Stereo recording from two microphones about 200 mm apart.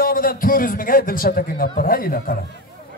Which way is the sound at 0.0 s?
45° left (ahead or behind).